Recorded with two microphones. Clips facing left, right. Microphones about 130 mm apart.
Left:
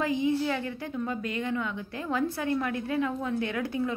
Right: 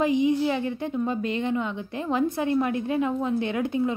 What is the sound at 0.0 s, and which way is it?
A woman's voice, 20° right (ahead or behind).